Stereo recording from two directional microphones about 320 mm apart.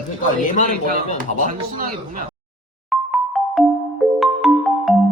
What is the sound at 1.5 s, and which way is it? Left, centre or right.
Speech, right.